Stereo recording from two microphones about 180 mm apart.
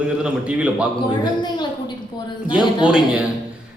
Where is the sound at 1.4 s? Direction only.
25° left (ahead or behind).